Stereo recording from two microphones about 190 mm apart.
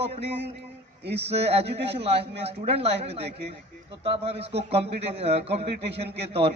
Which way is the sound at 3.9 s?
30° right (ahead or behind).